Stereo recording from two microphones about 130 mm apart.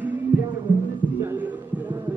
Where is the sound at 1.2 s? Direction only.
15° right (ahead or behind).